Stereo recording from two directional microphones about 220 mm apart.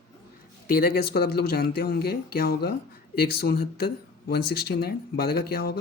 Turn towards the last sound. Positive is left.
turn(degrees=45)  # may be behind; listen again after turning